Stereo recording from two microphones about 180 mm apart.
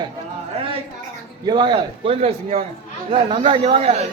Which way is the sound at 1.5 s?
25° right (ahead or behind).